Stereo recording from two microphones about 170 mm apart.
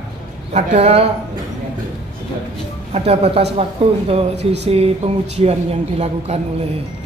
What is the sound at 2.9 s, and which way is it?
Speech, 35° right (ahead or behind).